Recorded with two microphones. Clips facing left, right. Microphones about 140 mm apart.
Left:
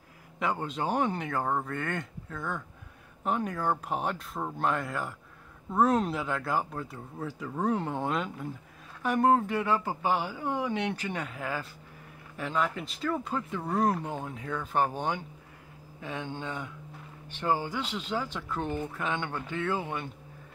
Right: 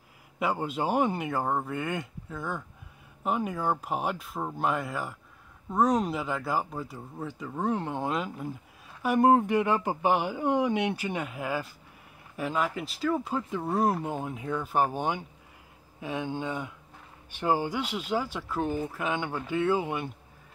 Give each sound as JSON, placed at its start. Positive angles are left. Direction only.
{"t": 0.4, "sound": "speech", "side_deg": -5}